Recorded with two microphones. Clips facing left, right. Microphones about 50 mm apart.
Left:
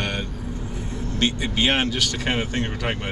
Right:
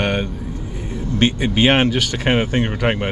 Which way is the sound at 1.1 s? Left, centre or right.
Right.